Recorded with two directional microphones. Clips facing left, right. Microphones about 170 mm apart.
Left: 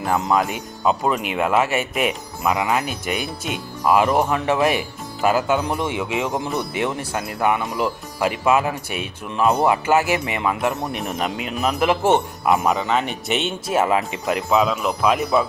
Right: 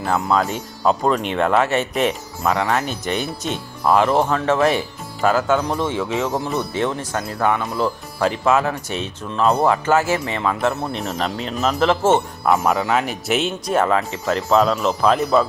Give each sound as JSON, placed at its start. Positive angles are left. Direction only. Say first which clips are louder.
{"t": 0.0, "sound": "speech", "louder": "even", "side_deg": 20}
{"t": 0.9, "sound": "speech", "louder": "right 2 dB", "side_deg": 5}
{"t": 12.5, "sound": "speech", "louder": "right 1 dB", "side_deg": 0}